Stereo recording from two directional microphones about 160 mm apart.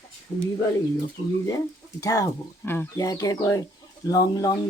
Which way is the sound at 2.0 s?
20° left (ahead or behind).